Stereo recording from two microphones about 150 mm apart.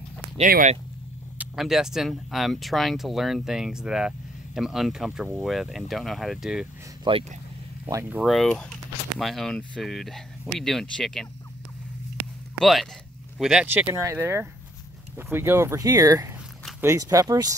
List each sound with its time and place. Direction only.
1.4 s speech: 5° right (ahead or behind)
7.1 s speech: 35° right (ahead or behind)
7.8 s speech: 15° right (ahead or behind)
8.3 s speech: 5° left (ahead or behind)
12.5 s speech: centre (ahead or behind)
13.8 s speech: 20° right (ahead or behind)